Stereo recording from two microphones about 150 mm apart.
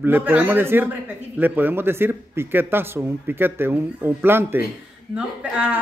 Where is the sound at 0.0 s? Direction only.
10° right (ahead or behind).